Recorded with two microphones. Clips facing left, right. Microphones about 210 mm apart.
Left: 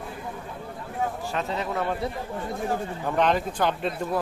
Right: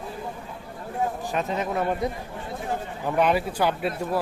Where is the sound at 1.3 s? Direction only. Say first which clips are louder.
Right 2 dB; 20° right (ahead or behind).